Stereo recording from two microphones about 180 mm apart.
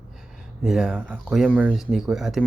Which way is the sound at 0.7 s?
Centre (ahead or behind).